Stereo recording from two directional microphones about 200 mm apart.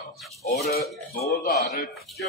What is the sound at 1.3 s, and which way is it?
Speech, 55° left (ahead or behind).